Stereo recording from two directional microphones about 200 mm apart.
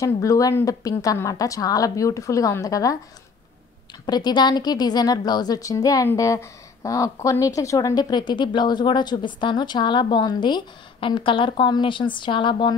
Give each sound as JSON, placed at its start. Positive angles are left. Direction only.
{"t": 0.0, "sound": "speech", "side_deg": 15}
{"t": 4.0, "sound": "a woman's voice", "side_deg": 20}